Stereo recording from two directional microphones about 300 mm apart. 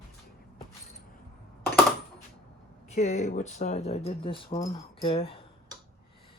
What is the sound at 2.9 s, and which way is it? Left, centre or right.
Speech, left.